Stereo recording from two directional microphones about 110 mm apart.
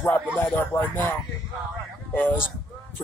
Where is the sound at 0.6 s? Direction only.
20° left (ahead or behind).